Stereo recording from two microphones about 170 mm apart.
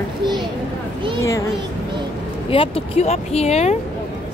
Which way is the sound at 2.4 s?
30° left (ahead or behind).